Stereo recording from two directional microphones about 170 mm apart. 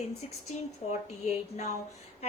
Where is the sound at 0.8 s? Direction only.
40° left (ahead or behind).